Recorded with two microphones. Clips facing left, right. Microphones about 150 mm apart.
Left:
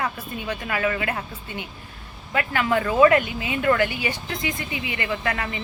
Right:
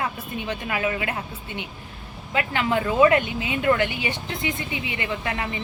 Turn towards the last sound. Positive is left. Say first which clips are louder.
# left 1 dB
turn(degrees=-20)  # may be behind; listen again after turning